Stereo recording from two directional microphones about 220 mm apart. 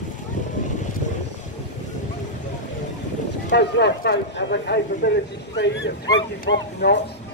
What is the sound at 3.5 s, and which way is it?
Speech, 50° left (ahead or behind).